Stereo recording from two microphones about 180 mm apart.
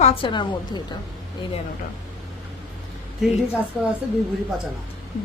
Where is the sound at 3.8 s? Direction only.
Centre (ahead or behind).